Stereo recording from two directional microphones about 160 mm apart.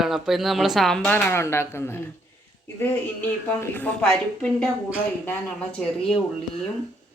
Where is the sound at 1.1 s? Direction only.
15° left (ahead or behind).